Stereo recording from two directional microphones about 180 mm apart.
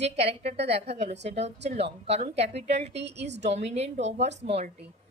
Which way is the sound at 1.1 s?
75° right (ahead or behind).